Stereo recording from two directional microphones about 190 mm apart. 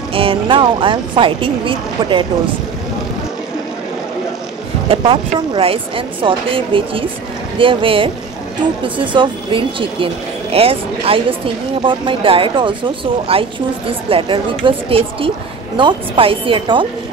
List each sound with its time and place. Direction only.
0.1 s a woman's voice: 30° right (ahead or behind)
4.8 s a woman's voice: 30° right (ahead or behind)